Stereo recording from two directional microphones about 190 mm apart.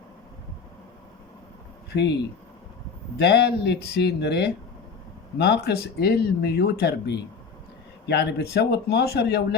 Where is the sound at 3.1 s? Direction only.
60° left (ahead or behind).